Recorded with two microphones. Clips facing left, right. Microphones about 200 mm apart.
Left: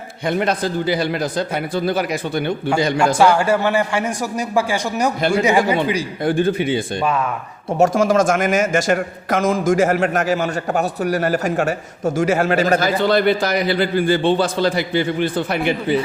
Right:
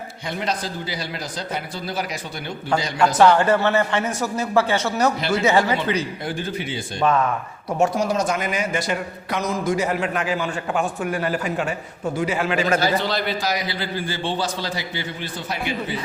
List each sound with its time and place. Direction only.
0.3 s a man's voice: 55° left (ahead or behind)
3.2 s a man's voice: 10° left (ahead or behind)
6.2 s a man's voice: 55° left (ahead or behind)
7.9 s speech: 90° left
8.3 s a man's voice: 45° left (ahead or behind)